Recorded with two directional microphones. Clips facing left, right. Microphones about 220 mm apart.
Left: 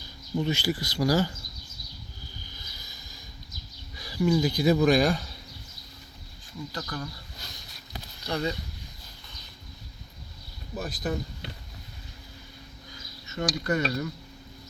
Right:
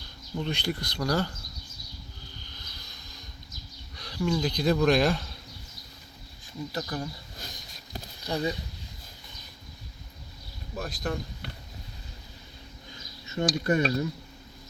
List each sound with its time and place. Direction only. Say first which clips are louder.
0.3 s speech: left 4 dB; 5° left (ahead or behind)
2.5 s a sound: even; 10° left (ahead or behind)
3.9 s speech: left 4 dB; 5° left (ahead or behind)
6.7 s speech: right 3 dB; 25° right (ahead or behind)
8.3 s speech: even; 15° right (ahead or behind)
10.8 s speech: left 1 dB; 5° left (ahead or behind)
13.3 s speech: right 2 dB; 30° right (ahead or behind)